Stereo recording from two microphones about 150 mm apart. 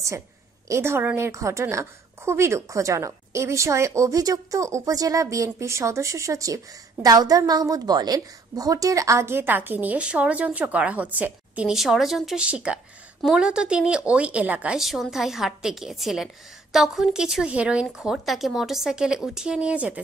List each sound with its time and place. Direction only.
0.7 s a woman's voice: 15° right (ahead or behind)